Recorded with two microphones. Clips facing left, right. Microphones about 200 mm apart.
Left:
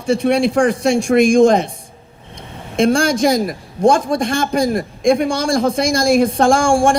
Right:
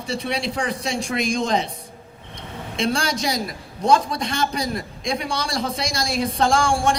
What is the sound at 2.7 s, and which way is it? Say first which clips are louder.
A man's voice: left 9 dB; 50° left (ahead or behind).